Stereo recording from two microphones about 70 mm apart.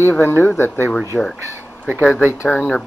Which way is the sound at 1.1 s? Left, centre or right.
Centre.